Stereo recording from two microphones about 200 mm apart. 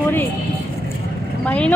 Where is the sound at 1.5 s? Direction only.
5° left (ahead or behind).